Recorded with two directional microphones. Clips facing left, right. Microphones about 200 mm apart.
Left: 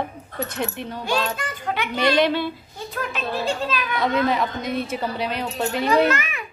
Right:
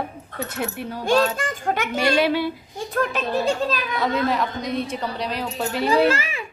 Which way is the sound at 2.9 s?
50° right (ahead or behind).